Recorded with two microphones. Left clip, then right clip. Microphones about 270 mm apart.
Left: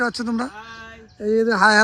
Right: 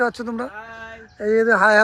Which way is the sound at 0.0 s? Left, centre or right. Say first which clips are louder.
Right 1 dB; centre.